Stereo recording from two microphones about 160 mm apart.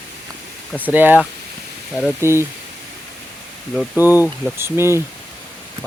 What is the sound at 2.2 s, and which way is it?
Speech, 15° right (ahead or behind).